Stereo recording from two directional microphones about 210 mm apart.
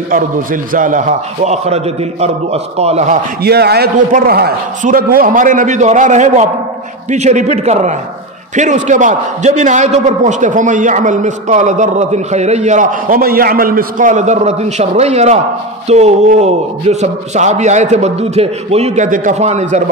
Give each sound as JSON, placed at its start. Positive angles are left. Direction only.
{"t": 0.1, "sound": "a man's voice", "side_deg": -40}
{"t": 3.4, "sound": "a man's voice", "side_deg": -50}